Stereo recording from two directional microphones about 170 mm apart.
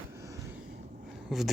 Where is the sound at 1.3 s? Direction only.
Centre (ahead or behind).